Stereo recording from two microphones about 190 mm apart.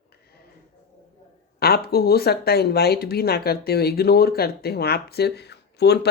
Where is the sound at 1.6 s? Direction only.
55° left (ahead or behind).